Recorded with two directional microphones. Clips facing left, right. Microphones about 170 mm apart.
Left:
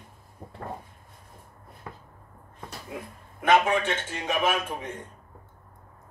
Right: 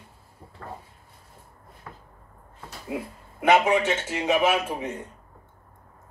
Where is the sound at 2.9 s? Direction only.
25° right (ahead or behind).